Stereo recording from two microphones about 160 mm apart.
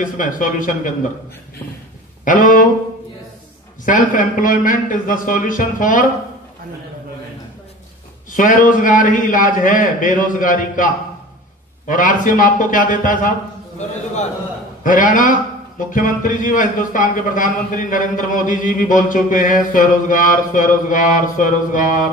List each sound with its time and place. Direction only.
0.0 s a man's voice: 55° left (ahead or behind)
2.2 s a man's voice: 55° left (ahead or behind)
3.8 s a man's voice: 55° left (ahead or behind)
8.4 s a man's voice: 55° left (ahead or behind)
11.9 s a man's voice: 55° left (ahead or behind)
14.8 s a man's voice: 55° left (ahead or behind)